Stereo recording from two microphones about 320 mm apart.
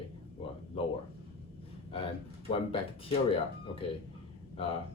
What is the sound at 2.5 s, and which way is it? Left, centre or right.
Speech, centre.